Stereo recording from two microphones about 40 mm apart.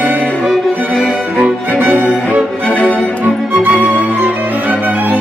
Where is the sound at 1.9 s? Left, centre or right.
Left.